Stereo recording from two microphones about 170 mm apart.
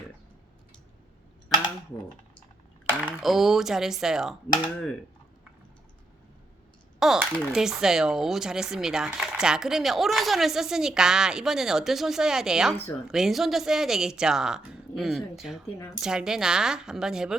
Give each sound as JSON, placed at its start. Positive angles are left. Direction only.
{"t": 3.2, "sound": "speech", "side_deg": 0}
{"t": 4.4, "sound": "speech", "side_deg": 25}
{"t": 7.2, "sound": "speech", "side_deg": -10}